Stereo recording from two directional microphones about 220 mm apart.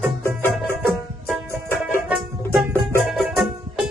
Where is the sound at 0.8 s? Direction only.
Centre (ahead or behind).